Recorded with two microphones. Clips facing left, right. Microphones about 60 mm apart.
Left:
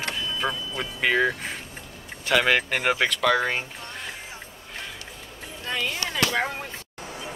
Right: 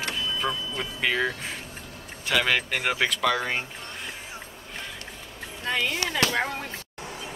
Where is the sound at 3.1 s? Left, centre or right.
Centre.